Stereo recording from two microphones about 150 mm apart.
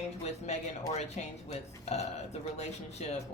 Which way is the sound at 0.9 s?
45° left (ahead or behind).